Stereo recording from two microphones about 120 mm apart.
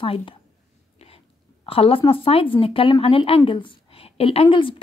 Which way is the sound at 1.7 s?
50° left (ahead or behind).